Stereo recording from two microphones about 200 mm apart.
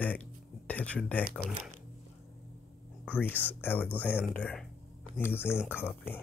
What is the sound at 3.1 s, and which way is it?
Speech, 10° left (ahead or behind).